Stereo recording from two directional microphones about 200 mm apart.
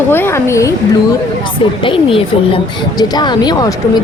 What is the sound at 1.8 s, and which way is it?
Speech, 25° left (ahead or behind).